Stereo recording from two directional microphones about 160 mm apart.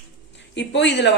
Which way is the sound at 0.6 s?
90° left.